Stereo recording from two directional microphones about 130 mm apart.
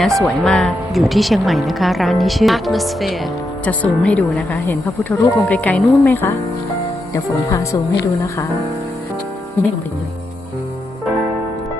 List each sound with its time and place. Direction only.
0.0 s speech: centre (ahead or behind); by 8.4 s 25° left (ahead or behind)